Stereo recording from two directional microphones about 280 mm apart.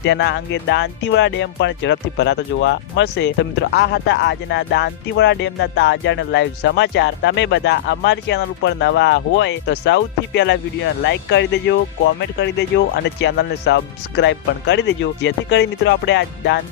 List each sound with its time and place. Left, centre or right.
0.0 s speech: left